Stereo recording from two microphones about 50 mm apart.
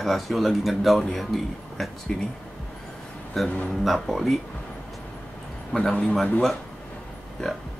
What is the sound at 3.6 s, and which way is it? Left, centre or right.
Speech, centre.